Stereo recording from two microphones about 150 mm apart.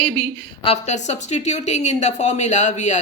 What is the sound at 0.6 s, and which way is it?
Speech, 45° left (ahead or behind).